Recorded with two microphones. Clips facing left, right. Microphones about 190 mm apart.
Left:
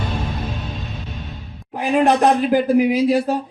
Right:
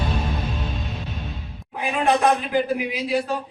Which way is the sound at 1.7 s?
45° left (ahead or behind).